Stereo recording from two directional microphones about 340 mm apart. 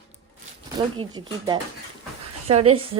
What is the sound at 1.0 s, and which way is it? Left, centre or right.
Speech, centre.